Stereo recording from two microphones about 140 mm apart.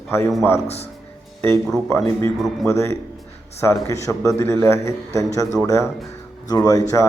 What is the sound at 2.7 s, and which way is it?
A man's voice, 20° left (ahead or behind).